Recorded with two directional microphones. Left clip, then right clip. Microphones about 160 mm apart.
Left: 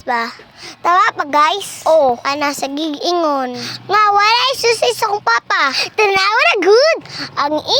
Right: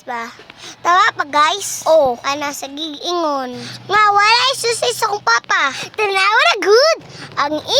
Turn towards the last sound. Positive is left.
turn(degrees=25)  # may be behind; listen again after turning